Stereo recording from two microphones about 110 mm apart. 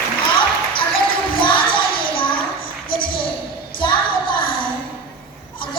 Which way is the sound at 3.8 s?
45° left (ahead or behind).